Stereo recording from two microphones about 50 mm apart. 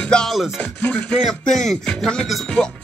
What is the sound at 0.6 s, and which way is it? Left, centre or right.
Music, left.